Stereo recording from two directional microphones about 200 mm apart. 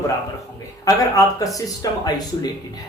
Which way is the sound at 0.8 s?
15° left (ahead or behind).